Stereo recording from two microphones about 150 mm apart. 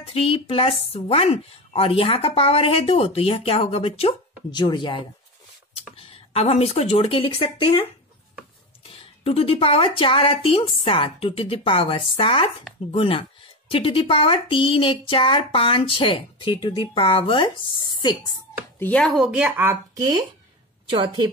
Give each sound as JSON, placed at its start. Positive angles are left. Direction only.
{"t": 0.0, "sound": "a woman's voice", "side_deg": 40}
{"t": 8.8, "sound": "a woman's voice", "side_deg": 40}
{"t": 18.8, "sound": "speech", "side_deg": 10}
{"t": 20.9, "sound": "a woman's voice", "side_deg": -30}